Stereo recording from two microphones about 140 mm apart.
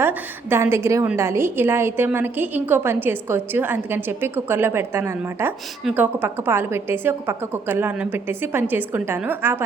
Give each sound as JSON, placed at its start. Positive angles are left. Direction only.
{"t": 0.0, "sound": "a woman's voice", "side_deg": -15}